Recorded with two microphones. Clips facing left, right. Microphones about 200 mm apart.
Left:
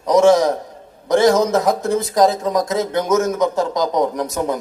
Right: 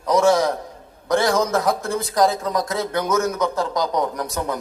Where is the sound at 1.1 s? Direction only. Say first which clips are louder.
Left 5 dB; 20° left (ahead or behind).